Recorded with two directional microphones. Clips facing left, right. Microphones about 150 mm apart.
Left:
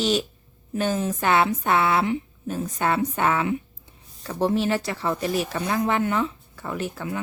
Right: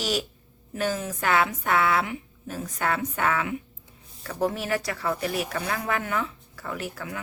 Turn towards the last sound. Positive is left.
turn(degrees=25)  # may be behind; listen again after turning